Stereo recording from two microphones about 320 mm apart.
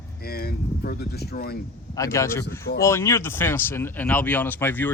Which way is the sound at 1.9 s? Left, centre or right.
Centre.